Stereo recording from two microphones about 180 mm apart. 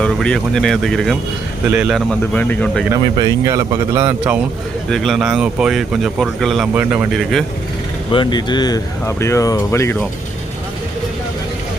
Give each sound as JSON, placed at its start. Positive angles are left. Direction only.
{"t": 0.0, "sound": "speech", "side_deg": 5}
{"t": 2.9, "sound": "speech", "side_deg": -20}
{"t": 4.9, "sound": "speech", "side_deg": 0}
{"t": 8.1, "sound": "speech", "side_deg": 25}